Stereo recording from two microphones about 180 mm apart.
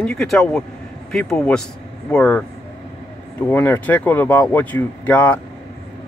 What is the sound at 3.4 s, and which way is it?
Speech, 10° left (ahead or behind).